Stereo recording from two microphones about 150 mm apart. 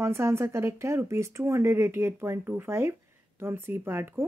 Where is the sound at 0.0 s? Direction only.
15° right (ahead or behind).